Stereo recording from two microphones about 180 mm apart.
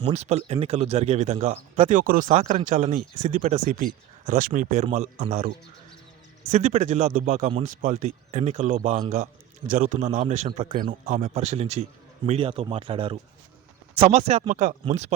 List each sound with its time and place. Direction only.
0.0 s speech: 35° right (ahead or behind)
6.5 s speech: 40° right (ahead or behind)
9.2 s speech: 50° right (ahead or behind)